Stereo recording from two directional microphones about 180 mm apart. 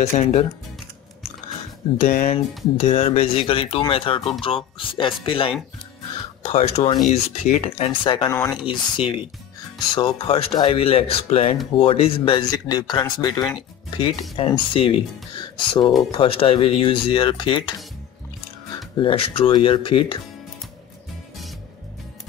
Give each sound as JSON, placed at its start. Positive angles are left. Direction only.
{"t": 0.0, "sound": "speech", "side_deg": 35}
{"t": 2.0, "sound": "speech", "side_deg": 50}
{"t": 2.3, "sound": "speech", "side_deg": 35}
{"t": 7.0, "sound": "speech", "side_deg": 45}
{"t": 18.9, "sound": "speech", "side_deg": 30}